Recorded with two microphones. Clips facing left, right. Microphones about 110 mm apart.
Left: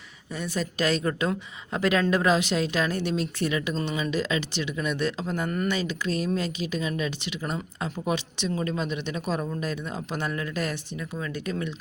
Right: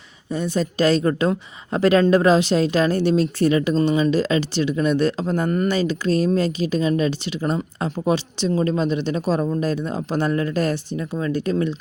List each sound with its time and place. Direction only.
0.3 s a woman's voice: 25° right (ahead or behind)